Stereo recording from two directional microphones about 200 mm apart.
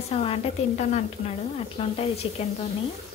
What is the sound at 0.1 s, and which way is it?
A woman's voice, 30° left (ahead or behind).